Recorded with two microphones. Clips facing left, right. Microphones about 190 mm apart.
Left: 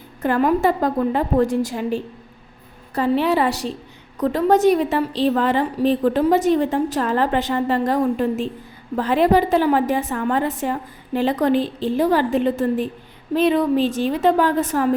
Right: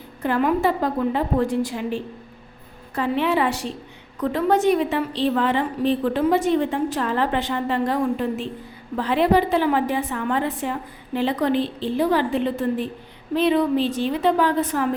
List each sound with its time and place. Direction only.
0.2 s a woman's voice: 45° left (ahead or behind)